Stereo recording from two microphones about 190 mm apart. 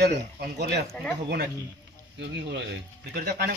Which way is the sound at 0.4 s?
60° right (ahead or behind).